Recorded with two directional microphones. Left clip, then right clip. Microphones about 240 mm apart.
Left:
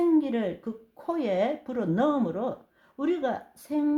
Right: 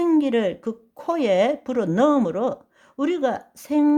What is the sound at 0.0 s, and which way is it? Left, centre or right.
A woman's voice, right.